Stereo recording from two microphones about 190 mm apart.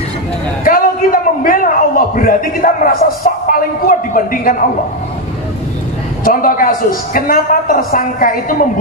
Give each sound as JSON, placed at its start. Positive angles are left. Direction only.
{"t": 0.7, "sound": "a man's voice", "side_deg": 45}
{"t": 6.2, "sound": "a woman's voice", "side_deg": 45}